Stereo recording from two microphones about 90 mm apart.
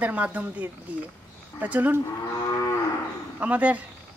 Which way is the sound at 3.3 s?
15° right (ahead or behind).